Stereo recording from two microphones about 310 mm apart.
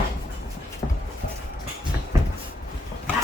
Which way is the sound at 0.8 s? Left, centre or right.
Left.